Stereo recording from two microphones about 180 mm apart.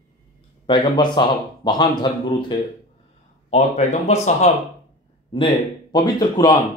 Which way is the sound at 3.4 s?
40° left (ahead or behind).